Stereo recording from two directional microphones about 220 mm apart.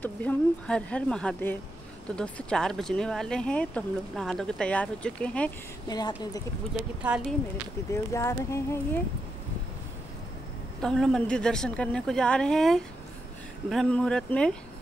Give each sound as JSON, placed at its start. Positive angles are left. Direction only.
{"t": 0.0, "sound": "speech", "side_deg": 10}
{"t": 5.9, "sound": "speech", "side_deg": 20}
{"t": 7.0, "sound": "speech", "side_deg": -5}
{"t": 7.9, "sound": "speech", "side_deg": 15}
{"t": 10.8, "sound": "speech", "side_deg": 5}